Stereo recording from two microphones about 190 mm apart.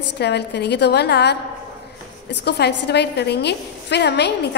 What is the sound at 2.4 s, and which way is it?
A woman's voice, 60° left (ahead or behind).